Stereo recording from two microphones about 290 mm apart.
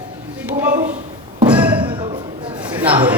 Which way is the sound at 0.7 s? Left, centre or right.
Right.